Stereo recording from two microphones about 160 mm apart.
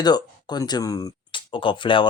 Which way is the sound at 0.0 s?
25° left (ahead or behind).